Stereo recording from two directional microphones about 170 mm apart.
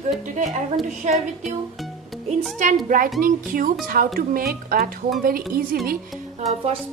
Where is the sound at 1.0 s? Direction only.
45° right (ahead or behind).